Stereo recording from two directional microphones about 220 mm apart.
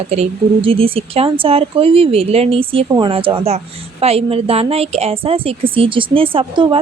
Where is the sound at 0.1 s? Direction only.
25° right (ahead or behind).